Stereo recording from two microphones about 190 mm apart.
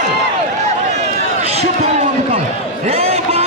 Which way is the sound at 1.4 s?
35° right (ahead or behind).